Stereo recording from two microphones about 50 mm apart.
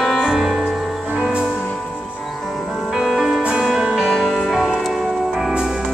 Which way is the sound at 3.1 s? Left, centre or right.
Centre.